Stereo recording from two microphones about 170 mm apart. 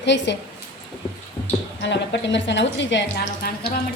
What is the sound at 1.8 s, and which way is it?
A woman's voice, 90° left.